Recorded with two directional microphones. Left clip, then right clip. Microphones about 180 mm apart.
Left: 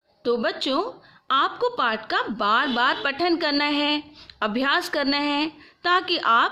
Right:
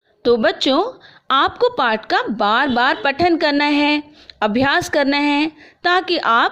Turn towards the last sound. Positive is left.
turn(degrees=-30)  # may be behind; listen again after turning